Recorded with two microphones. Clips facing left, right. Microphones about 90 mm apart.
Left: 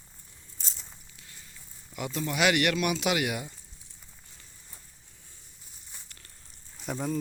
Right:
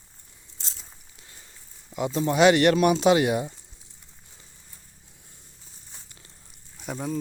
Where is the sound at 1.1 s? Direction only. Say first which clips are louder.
Right 1 dB; 25° right (ahead or behind).